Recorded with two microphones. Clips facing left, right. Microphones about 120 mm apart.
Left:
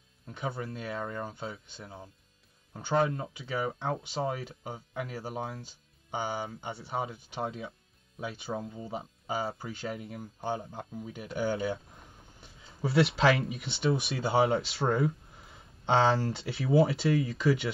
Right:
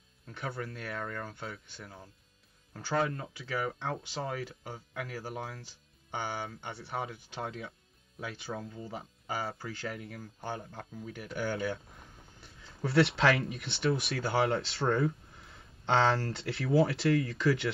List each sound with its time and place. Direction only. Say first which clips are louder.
0.3 s speech: left 3 dB; 20° left (ahead or behind)
12.9 s speech: left 1 dB; centre (ahead or behind)
13.6 s speech: left 2 dB; 25° left (ahead or behind)
14.5 s speech: left 2 dB; centre (ahead or behind)
16.6 s speech: left 2 dB; 25° left (ahead or behind)